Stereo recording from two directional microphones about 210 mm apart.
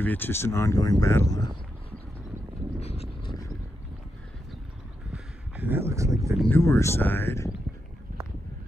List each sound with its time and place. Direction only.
0.0 s speech: 10° left (ahead or behind)
2.8 s roaring cats: 30° left (ahead or behind)
5.7 s speech: 10° right (ahead or behind)
6.3 s speech: 10° left (ahead or behind)